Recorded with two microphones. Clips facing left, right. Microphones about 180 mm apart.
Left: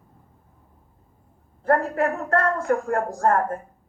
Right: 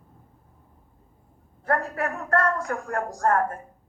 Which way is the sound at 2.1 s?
25° left (ahead or behind).